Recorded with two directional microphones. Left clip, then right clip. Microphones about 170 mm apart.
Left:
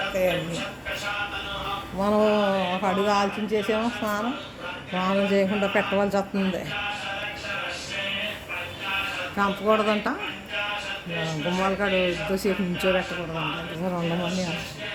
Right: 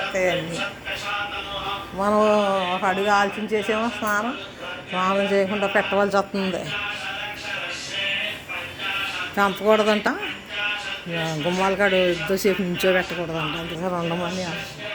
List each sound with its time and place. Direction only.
2.0 s a man's voice: 5° left (ahead or behind)
6.0 s speech: 5° right (ahead or behind)
9.3 s speech: 20° right (ahead or behind)
11.6 s speech: 25° right (ahead or behind)